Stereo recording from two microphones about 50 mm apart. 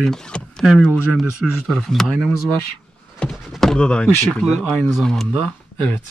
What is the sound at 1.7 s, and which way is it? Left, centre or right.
Speech, centre.